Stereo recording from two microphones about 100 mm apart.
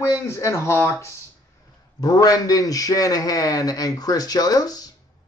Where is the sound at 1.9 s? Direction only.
40° left (ahead or behind).